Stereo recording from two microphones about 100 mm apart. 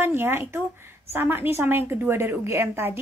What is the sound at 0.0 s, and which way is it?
A woman's voice, 20° right (ahead or behind).